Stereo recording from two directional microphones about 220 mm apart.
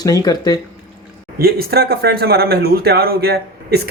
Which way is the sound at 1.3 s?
45° right (ahead or behind).